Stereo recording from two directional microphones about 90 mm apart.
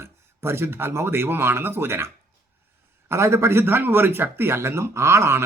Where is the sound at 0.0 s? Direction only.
30° right (ahead or behind).